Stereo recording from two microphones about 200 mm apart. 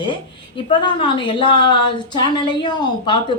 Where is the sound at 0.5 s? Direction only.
25° left (ahead or behind).